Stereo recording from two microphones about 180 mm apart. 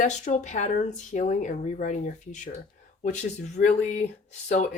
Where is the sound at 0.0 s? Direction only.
45° left (ahead or behind).